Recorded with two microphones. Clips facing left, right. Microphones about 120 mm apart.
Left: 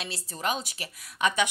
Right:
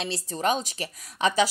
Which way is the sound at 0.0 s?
35° right (ahead or behind).